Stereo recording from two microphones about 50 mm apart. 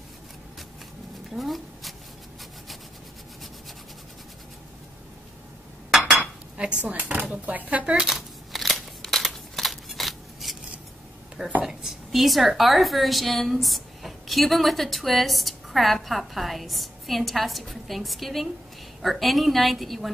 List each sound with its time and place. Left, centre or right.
1.3 s a sound: centre
6.0 s dishes: centre
6.8 s speech: right
7.8 s speech: centre
8.1 s scissors: centre
11.6 s speech: centre